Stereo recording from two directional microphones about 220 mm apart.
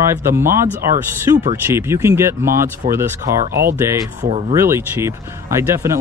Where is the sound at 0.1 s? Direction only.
10° right (ahead or behind).